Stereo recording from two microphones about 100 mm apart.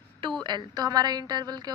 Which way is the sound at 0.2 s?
50° right (ahead or behind).